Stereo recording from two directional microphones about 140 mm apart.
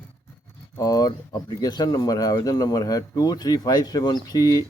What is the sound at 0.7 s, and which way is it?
Speech, 25° left (ahead or behind).